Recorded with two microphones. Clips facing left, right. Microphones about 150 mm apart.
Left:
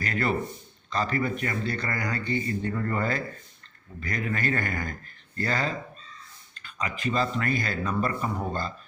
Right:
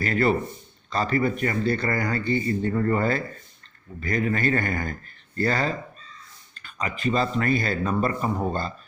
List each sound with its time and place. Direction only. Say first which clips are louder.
0.0 s speech: right 5 dB; 35° right (ahead or behind)
6.5 s a sound: right 2 dB; 50° right (ahead or behind)
7.0 s speech: right 4 dB; 35° right (ahead or behind)